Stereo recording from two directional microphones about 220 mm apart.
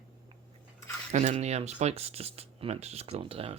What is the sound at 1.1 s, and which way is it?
Speech, 30° right (ahead or behind).